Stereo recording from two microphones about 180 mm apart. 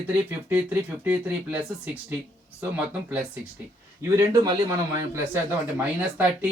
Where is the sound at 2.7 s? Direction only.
5° right (ahead or behind).